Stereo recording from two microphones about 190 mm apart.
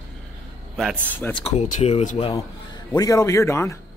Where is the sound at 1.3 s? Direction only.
30° left (ahead or behind).